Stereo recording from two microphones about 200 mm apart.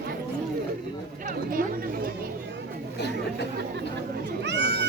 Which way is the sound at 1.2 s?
45° right (ahead or behind).